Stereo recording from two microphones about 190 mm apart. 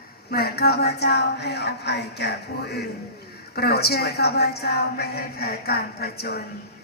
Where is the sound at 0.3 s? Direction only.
55° left (ahead or behind).